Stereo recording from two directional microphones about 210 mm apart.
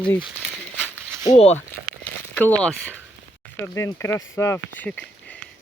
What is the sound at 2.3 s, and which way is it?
Speech, 5° left (ahead or behind).